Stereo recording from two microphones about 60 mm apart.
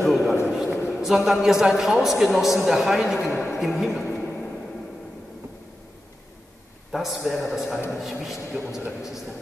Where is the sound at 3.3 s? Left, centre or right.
Left.